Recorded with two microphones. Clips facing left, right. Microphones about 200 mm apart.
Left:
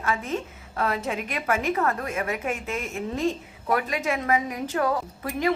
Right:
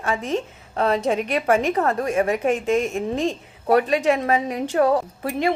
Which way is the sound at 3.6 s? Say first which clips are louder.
Right 8 dB; 30° right (ahead or behind).